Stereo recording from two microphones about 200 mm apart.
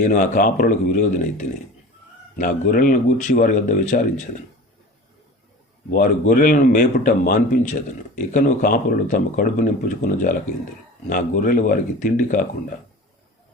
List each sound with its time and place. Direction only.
0.0 s speech: 40° left (ahead or behind)
5.9 s speech: 40° left (ahead or behind)